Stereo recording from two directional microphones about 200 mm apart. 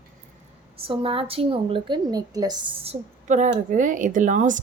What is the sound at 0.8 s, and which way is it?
A woman's voice, 25° right (ahead or behind).